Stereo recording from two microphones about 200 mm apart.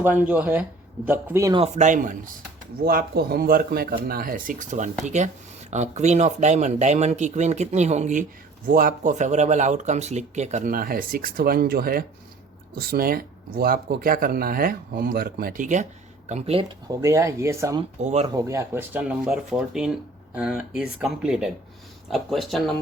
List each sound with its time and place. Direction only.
0.0 s speech: 10° right (ahead or behind)
1.6 s speech: 35° right (ahead or behind)
16.9 s speech: 15° right (ahead or behind)
18.0 s speech: 35° right (ahead or behind)
18.3 s speech: 15° right (ahead or behind); by 22.7 s centre (ahead or behind)